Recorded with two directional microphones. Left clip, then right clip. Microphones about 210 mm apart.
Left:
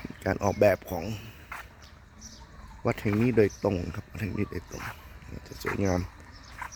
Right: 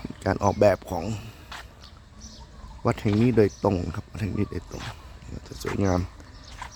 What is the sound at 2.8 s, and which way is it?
Speech, 5° right (ahead or behind).